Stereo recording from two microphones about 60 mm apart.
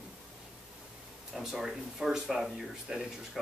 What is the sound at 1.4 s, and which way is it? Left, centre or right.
Speech, centre.